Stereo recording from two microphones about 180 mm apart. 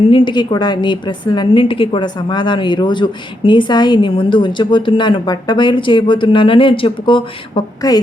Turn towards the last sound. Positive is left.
turn(degrees=25)  # may be behind; listen again after turning